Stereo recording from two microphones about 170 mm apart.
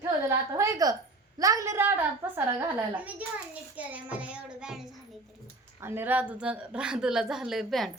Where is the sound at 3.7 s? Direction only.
10° right (ahead or behind).